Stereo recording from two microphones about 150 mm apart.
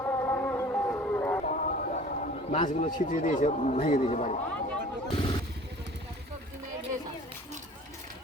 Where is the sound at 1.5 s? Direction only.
65° left (ahead or behind).